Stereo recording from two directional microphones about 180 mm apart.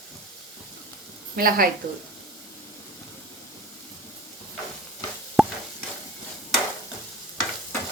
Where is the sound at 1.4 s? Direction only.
55° right (ahead or behind).